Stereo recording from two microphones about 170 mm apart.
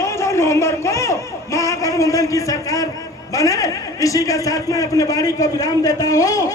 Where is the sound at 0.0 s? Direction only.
15° left (ahead or behind).